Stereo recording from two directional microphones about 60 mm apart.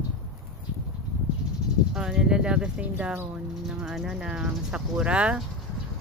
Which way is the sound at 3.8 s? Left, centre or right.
Centre.